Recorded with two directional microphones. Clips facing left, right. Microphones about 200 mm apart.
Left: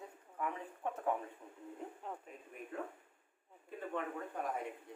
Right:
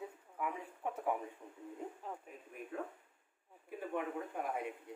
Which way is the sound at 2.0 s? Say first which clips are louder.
Even; centre (ahead or behind).